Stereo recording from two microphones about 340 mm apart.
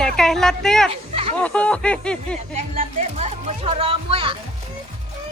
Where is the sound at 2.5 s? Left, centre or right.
Centre.